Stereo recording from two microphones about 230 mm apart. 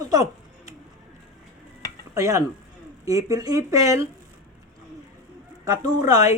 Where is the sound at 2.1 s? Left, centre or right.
Centre.